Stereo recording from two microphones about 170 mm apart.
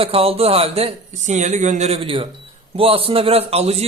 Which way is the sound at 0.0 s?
35° right (ahead or behind).